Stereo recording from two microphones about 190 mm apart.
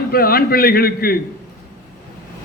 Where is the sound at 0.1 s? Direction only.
50° left (ahead or behind).